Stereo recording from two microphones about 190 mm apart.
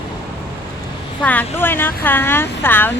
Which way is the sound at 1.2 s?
10° left (ahead or behind).